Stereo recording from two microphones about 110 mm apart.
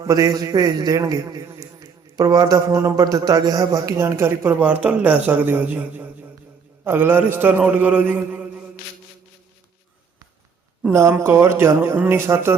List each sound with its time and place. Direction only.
0.0 s a man's voice: 30° right (ahead or behind); by 8.6 s 15° right (ahead or behind)
11.2 s speech: 25° right (ahead or behind)